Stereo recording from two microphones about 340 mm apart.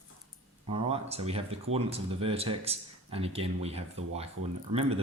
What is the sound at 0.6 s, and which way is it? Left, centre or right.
Speech, centre.